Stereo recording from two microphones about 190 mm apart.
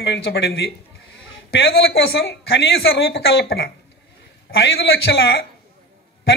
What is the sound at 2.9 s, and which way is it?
Speech, 55° left (ahead or behind).